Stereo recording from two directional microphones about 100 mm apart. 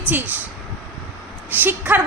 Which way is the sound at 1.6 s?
20° right (ahead or behind).